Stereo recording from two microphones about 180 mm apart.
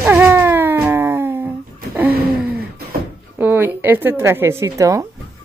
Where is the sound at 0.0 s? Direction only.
10° right (ahead or behind).